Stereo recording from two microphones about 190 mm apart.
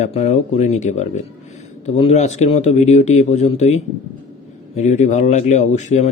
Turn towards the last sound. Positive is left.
turn(degrees=40)  # may be behind; listen again after turning